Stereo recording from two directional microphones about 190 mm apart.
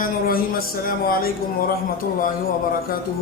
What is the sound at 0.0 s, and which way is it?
Speech, 50° left (ahead or behind).